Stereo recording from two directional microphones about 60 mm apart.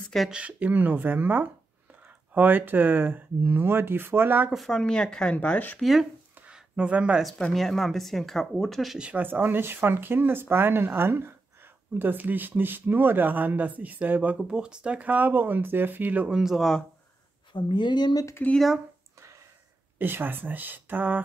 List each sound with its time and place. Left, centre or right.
0.3 s speech: right
4.6 s speech: centre
5.8 s speech: centre
6.5 s speech: centre
7.5 s speech: centre
9.1 s speech: right
14.5 s speech: centre
16.3 s speech: centre
18.4 s speech: left
20.0 s speech: right